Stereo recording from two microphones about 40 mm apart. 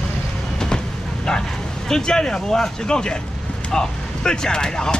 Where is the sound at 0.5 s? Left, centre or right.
Centre.